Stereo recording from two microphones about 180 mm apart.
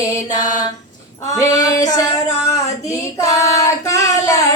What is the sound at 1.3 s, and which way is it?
Female singing, 20° left (ahead or behind).